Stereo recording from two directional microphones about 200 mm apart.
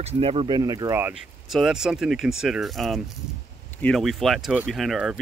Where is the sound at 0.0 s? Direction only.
30° right (ahead or behind).